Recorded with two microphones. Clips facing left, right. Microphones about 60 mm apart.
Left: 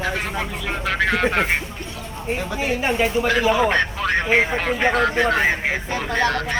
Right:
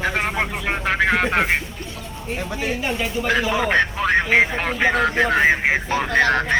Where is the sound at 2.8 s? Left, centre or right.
Left.